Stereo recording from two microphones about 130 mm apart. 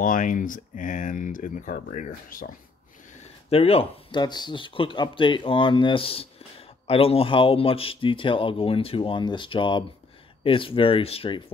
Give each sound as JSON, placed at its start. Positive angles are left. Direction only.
{"t": 0.0, "sound": "speech", "side_deg": 90}
{"t": 3.4, "sound": "speech", "side_deg": 50}
{"t": 4.2, "sound": "speech", "side_deg": 35}